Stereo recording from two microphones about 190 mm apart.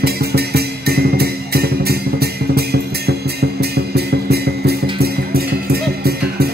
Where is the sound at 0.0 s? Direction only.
55° right (ahead or behind).